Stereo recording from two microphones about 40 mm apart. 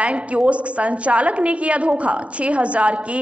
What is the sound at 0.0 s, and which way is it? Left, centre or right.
A woman's voice, right.